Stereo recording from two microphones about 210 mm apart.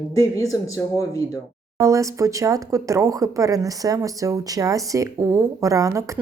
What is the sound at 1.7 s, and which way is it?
Speech, 15° right (ahead or behind).